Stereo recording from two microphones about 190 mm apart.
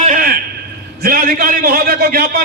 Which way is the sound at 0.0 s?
45° right (ahead or behind).